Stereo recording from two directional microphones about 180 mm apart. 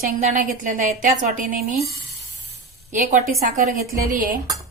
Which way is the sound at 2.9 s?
45° right (ahead or behind).